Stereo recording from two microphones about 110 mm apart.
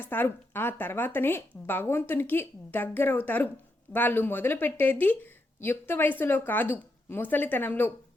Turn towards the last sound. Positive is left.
turn(degrees=15)  # may be behind; listen again after turning